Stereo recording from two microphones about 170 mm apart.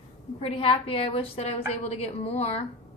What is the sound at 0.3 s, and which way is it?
A woman's voice, 35° left (ahead or behind).